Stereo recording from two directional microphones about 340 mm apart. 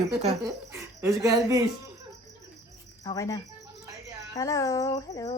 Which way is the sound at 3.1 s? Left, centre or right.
Centre.